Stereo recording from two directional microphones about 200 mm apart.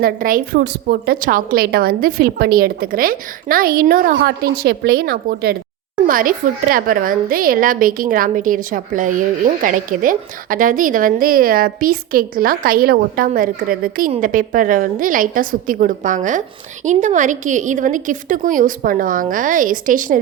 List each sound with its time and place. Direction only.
0.0 s a woman's voice: 45° right (ahead or behind)